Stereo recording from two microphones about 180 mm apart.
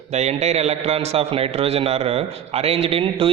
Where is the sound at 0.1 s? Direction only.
40° right (ahead or behind).